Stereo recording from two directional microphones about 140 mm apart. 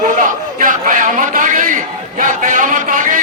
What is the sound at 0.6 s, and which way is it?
Crowd, 70° right (ahead or behind).